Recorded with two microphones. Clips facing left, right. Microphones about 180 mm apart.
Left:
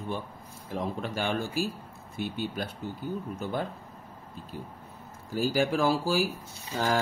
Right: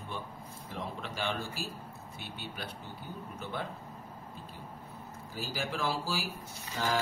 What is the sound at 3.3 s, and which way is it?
Speech, 40° left (ahead or behind).